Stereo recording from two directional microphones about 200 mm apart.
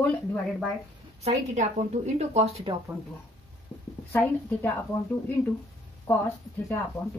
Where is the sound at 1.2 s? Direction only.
35° right (ahead or behind).